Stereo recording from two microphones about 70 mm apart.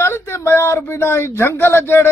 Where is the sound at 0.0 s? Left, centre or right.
Left.